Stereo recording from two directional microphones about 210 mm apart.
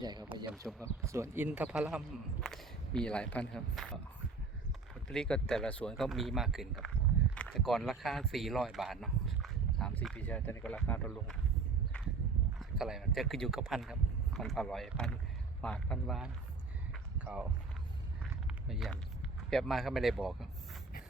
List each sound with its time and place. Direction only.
0.0 s speech: 20° right (ahead or behind); by 3.9 s 5° left (ahead or behind)
5.0 s speech: 5° left (ahead or behind)
12.5 s speech: centre (ahead or behind)
16.9 s a sound: 5° right (ahead or behind)
19.5 s speech: centre (ahead or behind)